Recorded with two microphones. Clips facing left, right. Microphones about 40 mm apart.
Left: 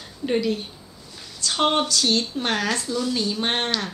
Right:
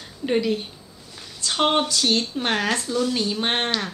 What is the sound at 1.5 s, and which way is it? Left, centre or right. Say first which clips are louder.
Speech: even; centre.